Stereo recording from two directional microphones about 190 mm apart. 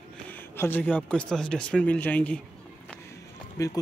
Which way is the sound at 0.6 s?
10° left (ahead or behind).